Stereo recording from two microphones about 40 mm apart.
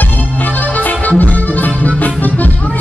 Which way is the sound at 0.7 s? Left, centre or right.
Left.